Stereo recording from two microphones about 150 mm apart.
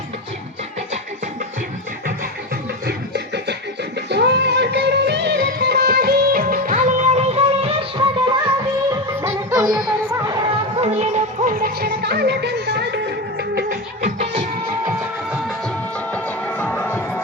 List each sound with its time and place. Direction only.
2.8 s music: 90° right; by 9.9 s 25° right (ahead or behind)
10.8 s music: 50° right (ahead or behind)
11.4 s music: 85° right
14.0 s music: 50° right (ahead or behind)
14.9 s music: 5° right (ahead or behind)
16.1 s music: 10° left (ahead or behind)